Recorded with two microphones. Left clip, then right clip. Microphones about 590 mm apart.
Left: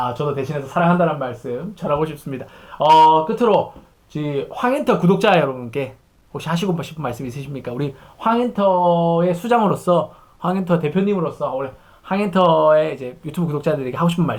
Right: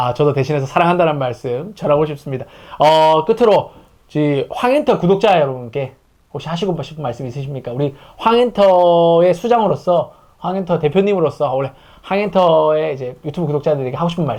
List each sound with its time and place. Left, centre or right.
0.0 s speech: right
1.8 s speech: right
5.0 s speech: centre
8.2 s speech: right
9.4 s speech: centre
10.9 s speech: right